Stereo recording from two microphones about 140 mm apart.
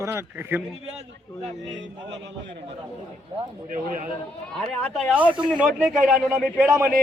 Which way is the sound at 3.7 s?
70° right (ahead or behind).